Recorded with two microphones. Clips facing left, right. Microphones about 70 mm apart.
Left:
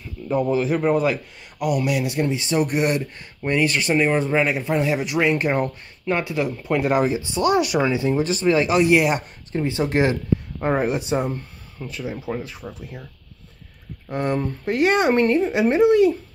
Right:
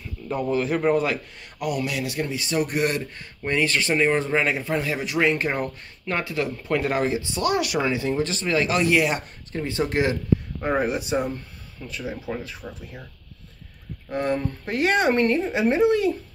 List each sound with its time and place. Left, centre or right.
0.3 s speech: centre; by 12.1 s left
12.1 s speech: centre
14.0 s speech: centre